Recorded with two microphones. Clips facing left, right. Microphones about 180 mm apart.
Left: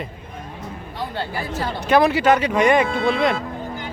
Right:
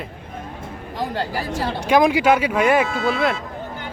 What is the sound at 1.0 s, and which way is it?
Speech, 40° right (ahead or behind).